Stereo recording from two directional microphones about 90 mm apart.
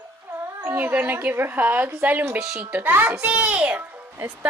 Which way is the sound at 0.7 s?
20° right (ahead or behind).